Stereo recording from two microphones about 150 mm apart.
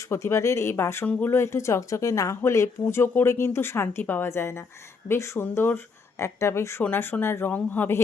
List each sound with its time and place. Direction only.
0.1 s speech: 20° left (ahead or behind)